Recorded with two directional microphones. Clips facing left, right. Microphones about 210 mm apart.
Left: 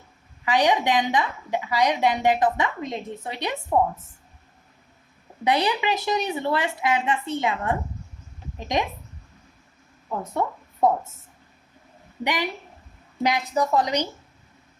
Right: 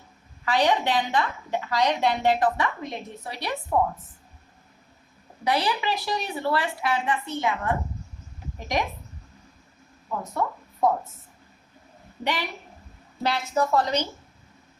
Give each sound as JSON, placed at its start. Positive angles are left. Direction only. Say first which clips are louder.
{"t": 0.4, "sound": "a woman's voice", "louder": "left 2 dB", "side_deg": 15}
{"t": 5.5, "sound": "a woman's voice", "louder": "left 3 dB", "side_deg": 20}
{"t": 12.2, "sound": "a woman's voice", "louder": "left 2 dB", "side_deg": 15}